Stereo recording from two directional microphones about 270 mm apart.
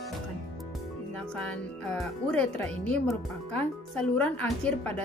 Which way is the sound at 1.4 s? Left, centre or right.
Centre.